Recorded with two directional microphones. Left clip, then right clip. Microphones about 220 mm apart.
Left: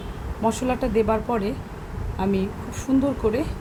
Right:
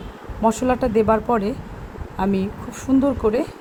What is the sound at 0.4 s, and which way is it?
Speech, 25° right (ahead or behind).